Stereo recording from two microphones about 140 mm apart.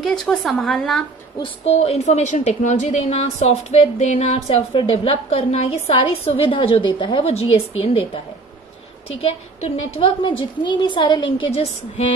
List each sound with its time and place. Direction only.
0.0 s a woman's voice: 5° left (ahead or behind)
1.6 s a woman's voice: 50° left (ahead or behind)
9.2 s a woman's voice: 45° left (ahead or behind)